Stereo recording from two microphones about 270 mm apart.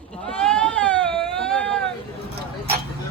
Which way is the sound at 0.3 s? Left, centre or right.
Centre.